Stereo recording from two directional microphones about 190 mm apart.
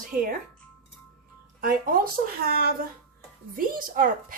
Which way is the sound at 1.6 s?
50° right (ahead or behind).